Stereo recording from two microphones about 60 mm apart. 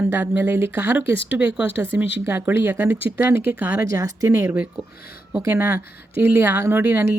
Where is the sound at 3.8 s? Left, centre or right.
Right.